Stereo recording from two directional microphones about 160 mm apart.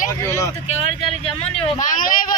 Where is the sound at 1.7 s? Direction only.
55° left (ahead or behind).